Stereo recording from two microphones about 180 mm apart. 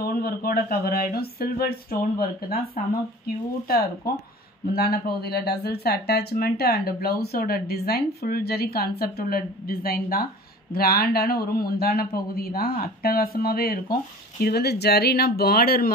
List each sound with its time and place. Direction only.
0.0 s speech: 55° left (ahead or behind)
4.1 s speech: 55° left (ahead or behind)